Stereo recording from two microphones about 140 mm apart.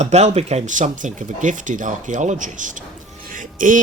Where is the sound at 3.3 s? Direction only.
70° right (ahead or behind).